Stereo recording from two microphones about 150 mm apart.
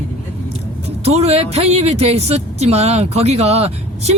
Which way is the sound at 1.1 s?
45° right (ahead or behind).